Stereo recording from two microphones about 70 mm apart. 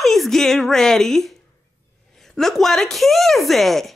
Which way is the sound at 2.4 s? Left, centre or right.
Centre.